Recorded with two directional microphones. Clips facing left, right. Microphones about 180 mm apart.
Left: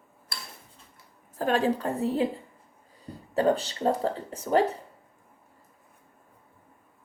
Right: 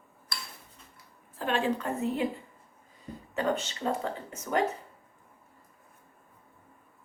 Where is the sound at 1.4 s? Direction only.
40° left (ahead or behind).